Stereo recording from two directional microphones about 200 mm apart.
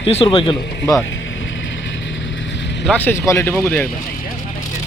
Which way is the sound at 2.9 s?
10° left (ahead or behind).